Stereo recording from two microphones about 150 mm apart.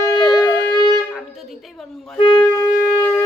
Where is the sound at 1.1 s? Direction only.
Centre (ahead or behind).